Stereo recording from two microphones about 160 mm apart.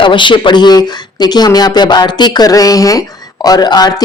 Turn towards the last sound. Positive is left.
turn(degrees=25)  # may be behind; listen again after turning